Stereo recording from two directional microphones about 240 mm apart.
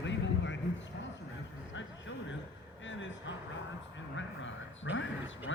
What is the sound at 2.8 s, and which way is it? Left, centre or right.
Vehicle, left.